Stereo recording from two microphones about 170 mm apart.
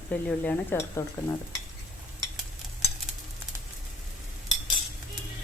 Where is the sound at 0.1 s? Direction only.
10° left (ahead or behind).